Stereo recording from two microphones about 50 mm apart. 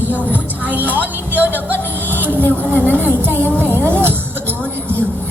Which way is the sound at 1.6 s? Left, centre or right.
Right.